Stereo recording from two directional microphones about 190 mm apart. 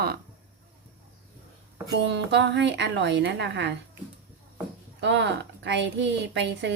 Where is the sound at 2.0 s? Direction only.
65° right (ahead or behind).